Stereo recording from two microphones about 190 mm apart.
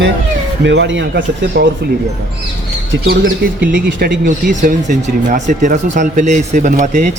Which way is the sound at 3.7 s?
50° right (ahead or behind).